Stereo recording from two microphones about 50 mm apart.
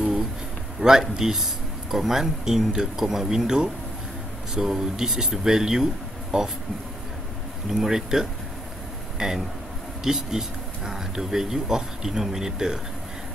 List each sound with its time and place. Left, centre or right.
0.7 s speech: centre
7.8 s speech: centre